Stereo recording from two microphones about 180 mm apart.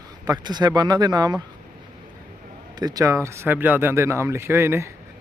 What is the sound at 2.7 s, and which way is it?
Speech, 20° right (ahead or behind).